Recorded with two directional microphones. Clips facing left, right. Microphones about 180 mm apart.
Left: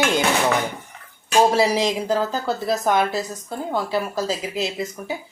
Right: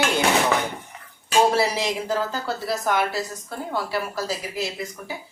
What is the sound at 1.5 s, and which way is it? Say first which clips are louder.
Speech: left 4 dB; 15° left (ahead or behind).